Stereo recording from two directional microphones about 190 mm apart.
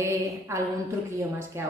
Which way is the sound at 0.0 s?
15° right (ahead or behind).